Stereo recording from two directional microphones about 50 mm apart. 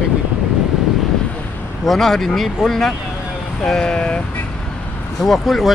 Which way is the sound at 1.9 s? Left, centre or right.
Centre.